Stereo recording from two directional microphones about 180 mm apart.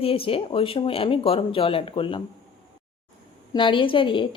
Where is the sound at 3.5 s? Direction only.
25° left (ahead or behind).